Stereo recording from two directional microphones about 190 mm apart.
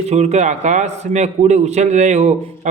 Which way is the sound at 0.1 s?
35° right (ahead or behind).